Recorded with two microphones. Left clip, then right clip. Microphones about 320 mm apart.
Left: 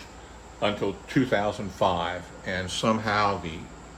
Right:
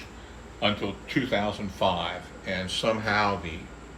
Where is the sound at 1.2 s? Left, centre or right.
Left.